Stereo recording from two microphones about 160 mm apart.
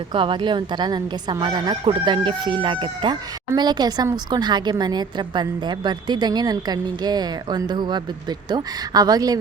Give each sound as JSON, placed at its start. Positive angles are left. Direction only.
{"t": 0.1, "sound": "a woman's voice", "side_deg": -30}